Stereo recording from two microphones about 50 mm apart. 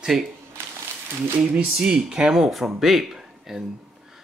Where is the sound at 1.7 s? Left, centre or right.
Centre.